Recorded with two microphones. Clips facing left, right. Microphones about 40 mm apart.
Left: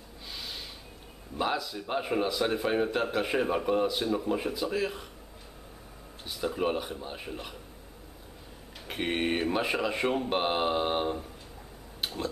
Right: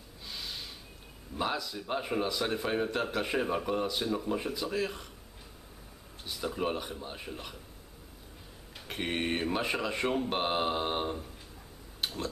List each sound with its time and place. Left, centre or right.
0.3 s snort: centre
1.4 s speech: centre
6.2 s speech: centre
8.8 s speech: centre
12.0 s a sound: centre